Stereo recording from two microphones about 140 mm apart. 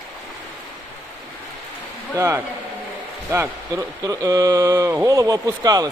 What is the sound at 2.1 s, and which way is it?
Speech, 20° right (ahead or behind).